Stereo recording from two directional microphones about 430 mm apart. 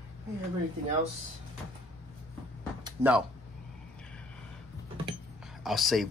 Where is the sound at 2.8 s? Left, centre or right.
Centre.